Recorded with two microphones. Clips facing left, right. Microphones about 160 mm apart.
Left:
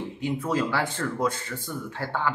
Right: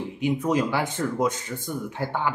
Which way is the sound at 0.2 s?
15° right (ahead or behind).